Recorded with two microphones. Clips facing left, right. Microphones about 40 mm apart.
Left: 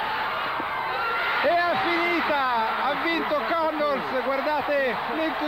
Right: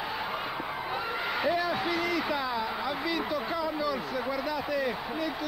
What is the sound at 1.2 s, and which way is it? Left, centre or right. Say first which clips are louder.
A man's voice: left 6 dB; left.